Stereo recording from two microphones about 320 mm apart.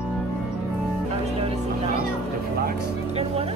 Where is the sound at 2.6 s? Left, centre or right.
Centre.